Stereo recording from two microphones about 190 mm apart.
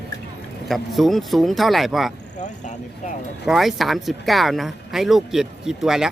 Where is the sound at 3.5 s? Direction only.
Centre (ahead or behind).